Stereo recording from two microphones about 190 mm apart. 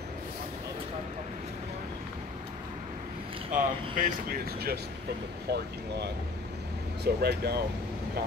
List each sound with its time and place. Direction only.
3.5 s speech: 45° right (ahead or behind)
7.2 s speech: 55° right (ahead or behind)